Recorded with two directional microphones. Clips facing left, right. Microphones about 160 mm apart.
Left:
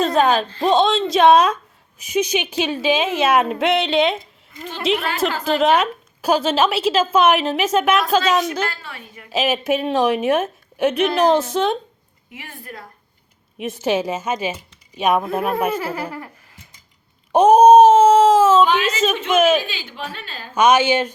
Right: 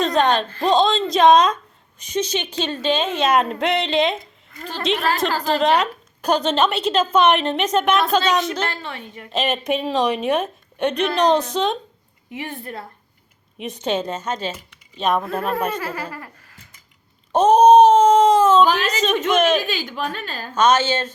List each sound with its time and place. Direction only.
0.0 s a woman's voice: 5° left (ahead or behind)
5.2 s a woman's voice: 5° left (ahead or behind)
8.7 s a woman's voice: 25° right (ahead or behind)
9.3 s a woman's voice: 5° left (ahead or behind)
12.4 s a woman's voice: 20° right (ahead or behind)
13.6 s speech: 5° left (ahead or behind)
17.3 s wail: 10° left (ahead or behind)
18.6 s a woman's voice: 40° right (ahead or behind)
19.3 s a woman's voice: 5° left (ahead or behind)
19.6 s a woman's voice: 45° right (ahead or behind)
20.6 s speech: 10° left (ahead or behind)